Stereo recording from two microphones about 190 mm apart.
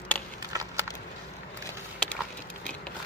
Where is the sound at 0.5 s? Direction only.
20° right (ahead or behind).